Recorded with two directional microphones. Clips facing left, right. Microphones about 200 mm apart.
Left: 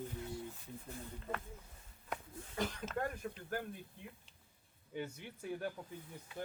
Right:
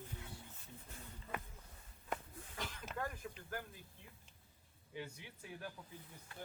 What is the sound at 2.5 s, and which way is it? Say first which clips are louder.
Speech: left 7 dB; 45° left (ahead or behind).